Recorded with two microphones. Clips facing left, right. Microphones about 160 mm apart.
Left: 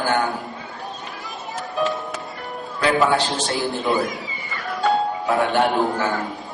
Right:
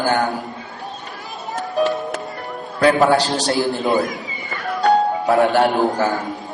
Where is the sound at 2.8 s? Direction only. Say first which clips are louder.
Right 4 dB; 40° right (ahead or behind).